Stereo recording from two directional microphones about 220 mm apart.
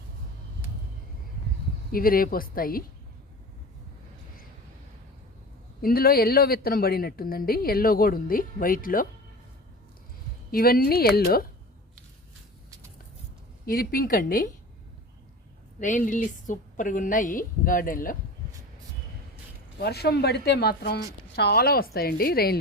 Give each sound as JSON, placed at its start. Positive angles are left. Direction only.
{"t": 1.9, "sound": "a woman's voice", "side_deg": 40}
{"t": 5.8, "sound": "a woman's voice", "side_deg": 40}
{"t": 10.5, "sound": "a woman's voice", "side_deg": 45}
{"t": 13.7, "sound": "a woman's voice", "side_deg": 40}
{"t": 15.8, "sound": "a woman's voice", "side_deg": 35}
{"t": 19.8, "sound": "a woman's voice", "side_deg": 45}